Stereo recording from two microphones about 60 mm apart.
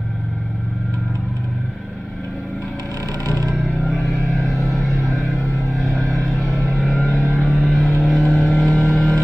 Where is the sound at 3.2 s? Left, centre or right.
Right.